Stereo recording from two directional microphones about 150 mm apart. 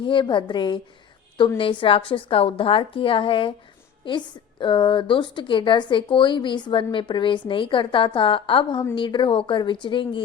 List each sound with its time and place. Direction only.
0.0 s speech: 35° left (ahead or behind)